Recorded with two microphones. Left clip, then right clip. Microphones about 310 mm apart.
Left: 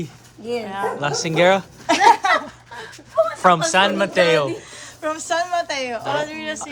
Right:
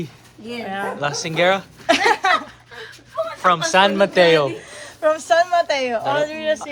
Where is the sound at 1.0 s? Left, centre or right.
Centre.